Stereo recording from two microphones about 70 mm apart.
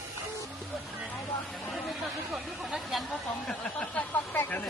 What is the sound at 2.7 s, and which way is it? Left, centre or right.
Chatter, centre.